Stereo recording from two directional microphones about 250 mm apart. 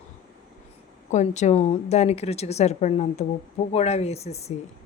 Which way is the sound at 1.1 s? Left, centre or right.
Left.